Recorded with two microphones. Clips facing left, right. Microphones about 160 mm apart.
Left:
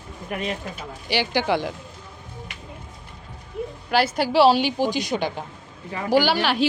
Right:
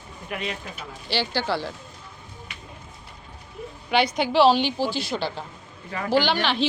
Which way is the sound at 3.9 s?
5° left (ahead or behind).